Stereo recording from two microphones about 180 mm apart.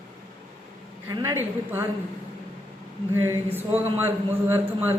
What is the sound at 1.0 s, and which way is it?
Speech, 15° right (ahead or behind).